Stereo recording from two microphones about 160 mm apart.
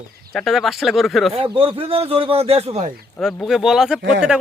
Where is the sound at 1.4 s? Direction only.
35° right (ahead or behind).